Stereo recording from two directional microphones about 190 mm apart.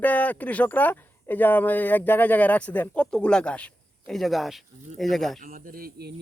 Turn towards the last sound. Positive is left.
turn(degrees=-55)  # may be behind; listen again after turning